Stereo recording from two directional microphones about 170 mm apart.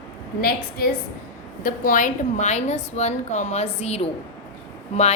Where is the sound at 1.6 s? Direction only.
55° left (ahead or behind).